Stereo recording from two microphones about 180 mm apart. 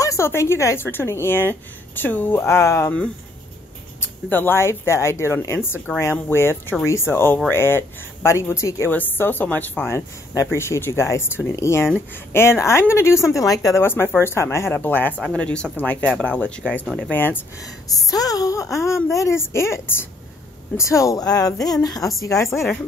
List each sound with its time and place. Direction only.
0.0 s speech: 15° left (ahead or behind)
22.5 s speech: centre (ahead or behind)